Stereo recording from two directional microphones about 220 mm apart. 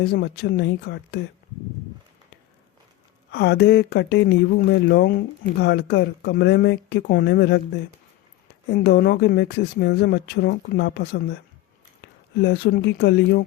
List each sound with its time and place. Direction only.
0.0 s speech: 50° left (ahead or behind)
3.3 s speech: 50° left (ahead or behind)
8.7 s speech: 45° left (ahead or behind)